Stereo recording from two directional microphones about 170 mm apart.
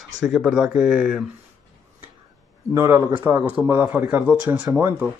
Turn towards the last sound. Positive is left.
turn(degrees=-15)  # may be behind; listen again after turning